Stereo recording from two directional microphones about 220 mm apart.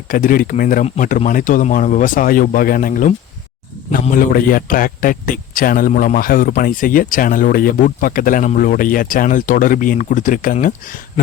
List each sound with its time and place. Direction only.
0.1 s a man's voice: 40° left (ahead or behind)